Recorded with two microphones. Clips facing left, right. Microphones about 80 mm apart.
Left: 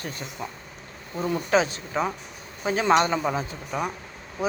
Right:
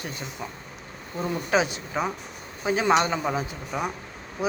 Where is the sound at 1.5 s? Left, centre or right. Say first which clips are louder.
Left 1 dB; centre.